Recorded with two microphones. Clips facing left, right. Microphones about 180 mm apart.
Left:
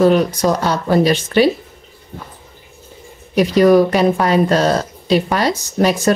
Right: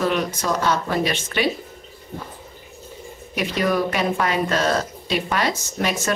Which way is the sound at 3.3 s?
35° left (ahead or behind).